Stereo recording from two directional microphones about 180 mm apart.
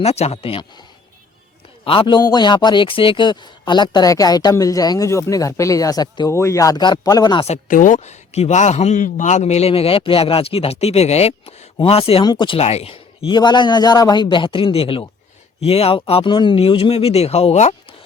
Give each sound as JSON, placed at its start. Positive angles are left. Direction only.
{"t": 0.0, "sound": "speech", "side_deg": 35}
{"t": 1.8, "sound": "a man's voice", "side_deg": 30}